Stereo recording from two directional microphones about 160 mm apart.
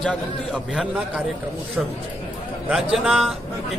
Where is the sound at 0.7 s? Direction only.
5° right (ahead or behind).